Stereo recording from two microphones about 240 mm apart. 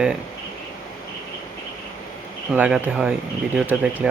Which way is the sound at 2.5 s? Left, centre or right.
Centre.